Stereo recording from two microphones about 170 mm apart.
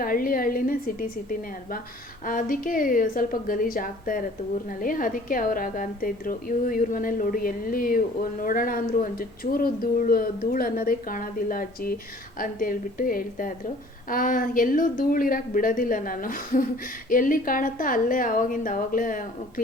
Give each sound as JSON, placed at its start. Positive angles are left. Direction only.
{"t": 0.0, "sound": "a woman's voice", "side_deg": 55}